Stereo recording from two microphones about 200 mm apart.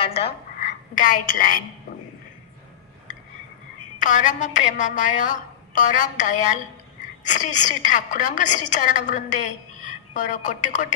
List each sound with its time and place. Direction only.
0.0 s a woman's voice: 30° left (ahead or behind); by 1.6 s 45° left (ahead or behind)
4.0 s a woman's voice: 40° left (ahead or behind)